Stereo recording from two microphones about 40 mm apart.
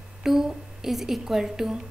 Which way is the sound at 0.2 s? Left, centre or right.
Centre.